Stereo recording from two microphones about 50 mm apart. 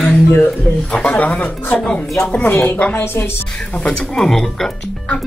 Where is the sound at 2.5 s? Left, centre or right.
Left.